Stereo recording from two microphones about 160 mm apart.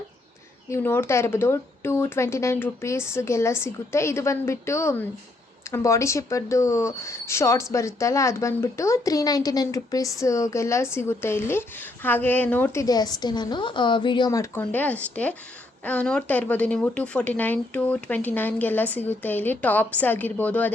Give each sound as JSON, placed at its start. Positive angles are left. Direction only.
{"t": 0.7, "sound": "speech", "side_deg": 15}